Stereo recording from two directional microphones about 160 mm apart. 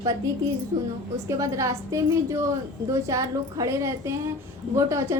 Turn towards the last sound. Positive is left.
turn(degrees=-20)  # may be behind; listen again after turning